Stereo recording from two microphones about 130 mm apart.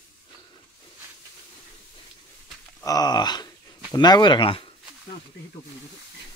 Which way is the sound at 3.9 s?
35° left (ahead or behind).